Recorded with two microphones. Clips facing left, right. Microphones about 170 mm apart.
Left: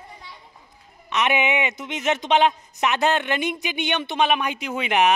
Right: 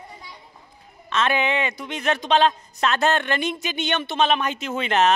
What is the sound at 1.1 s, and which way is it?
Speech, 20° left (ahead or behind).